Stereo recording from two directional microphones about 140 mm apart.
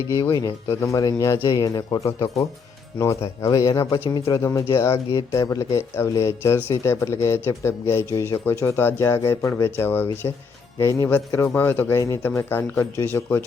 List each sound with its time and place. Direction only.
0.1 s speech: 30° left (ahead or behind)
3.4 s speech: 25° left (ahead or behind)